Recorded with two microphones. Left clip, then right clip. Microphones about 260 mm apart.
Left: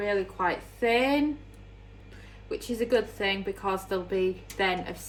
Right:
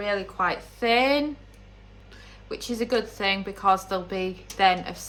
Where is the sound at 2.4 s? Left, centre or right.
Right.